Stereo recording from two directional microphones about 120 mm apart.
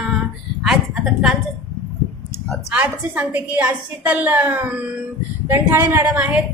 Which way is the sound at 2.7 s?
15° right (ahead or behind).